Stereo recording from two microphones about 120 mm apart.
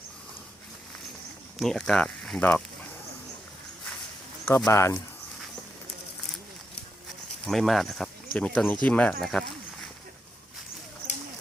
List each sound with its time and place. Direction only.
1.5 s speech: 5° left (ahead or behind)
4.4 s speech: 20° left (ahead or behind)
7.4 s speech: centre (ahead or behind)